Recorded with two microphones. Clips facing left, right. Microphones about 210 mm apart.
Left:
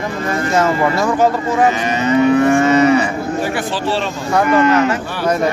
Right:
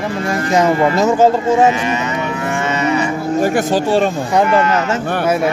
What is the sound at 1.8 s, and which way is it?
Moo, 35° left (ahead or behind).